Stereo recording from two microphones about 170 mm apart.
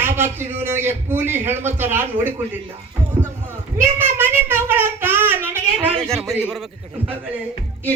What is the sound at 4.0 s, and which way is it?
Child singing, 15° right (ahead or behind).